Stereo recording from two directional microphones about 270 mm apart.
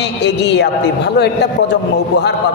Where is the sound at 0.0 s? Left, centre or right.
Left.